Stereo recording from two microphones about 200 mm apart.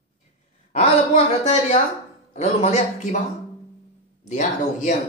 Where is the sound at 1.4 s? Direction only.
35° left (ahead or behind).